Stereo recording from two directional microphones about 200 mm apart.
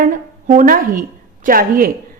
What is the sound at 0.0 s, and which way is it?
A woman's voice, 40° right (ahead or behind).